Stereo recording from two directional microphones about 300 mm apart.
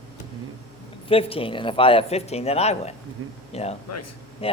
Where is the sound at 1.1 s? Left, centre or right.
Centre.